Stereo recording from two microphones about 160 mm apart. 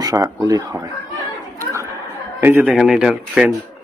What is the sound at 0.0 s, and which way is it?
Speech, 20° right (ahead or behind).